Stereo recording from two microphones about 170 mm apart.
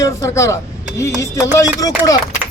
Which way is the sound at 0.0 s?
20° left (ahead or behind).